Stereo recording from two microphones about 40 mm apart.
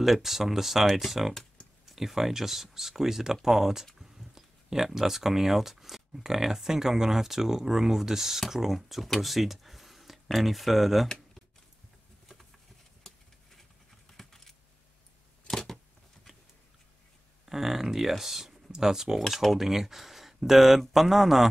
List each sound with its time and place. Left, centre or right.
0.0 s speech: centre
11.1 s computer keyboard: centre
13.0 s a sound: centre
17.5 s speech: centre
19.1 s speech: centre